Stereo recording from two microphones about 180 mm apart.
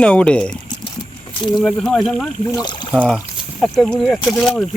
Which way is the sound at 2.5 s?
25° left (ahead or behind).